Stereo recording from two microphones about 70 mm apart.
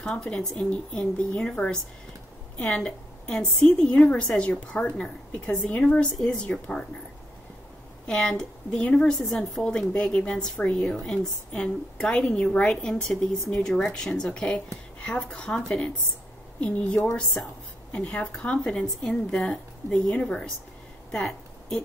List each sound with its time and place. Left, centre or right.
0.0 s a woman's voice: centre
8.1 s speech: centre
17.9 s speech: centre
21.1 s a sound: centre